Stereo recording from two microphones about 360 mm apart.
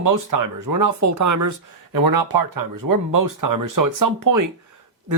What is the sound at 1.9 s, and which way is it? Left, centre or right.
Speech, right.